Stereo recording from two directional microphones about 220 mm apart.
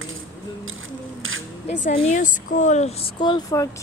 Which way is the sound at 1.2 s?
65° right (ahead or behind).